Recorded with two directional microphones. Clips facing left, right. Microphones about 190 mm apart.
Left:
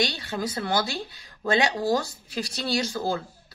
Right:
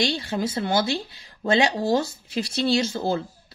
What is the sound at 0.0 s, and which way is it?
A woman's voice, 25° right (ahead or behind).